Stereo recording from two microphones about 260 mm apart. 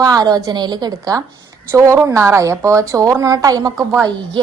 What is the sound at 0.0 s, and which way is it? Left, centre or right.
A woman's voice, centre.